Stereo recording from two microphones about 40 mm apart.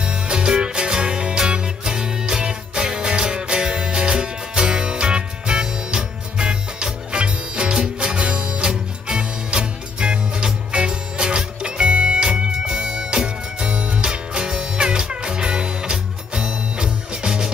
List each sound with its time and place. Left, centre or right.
0.0 s music: right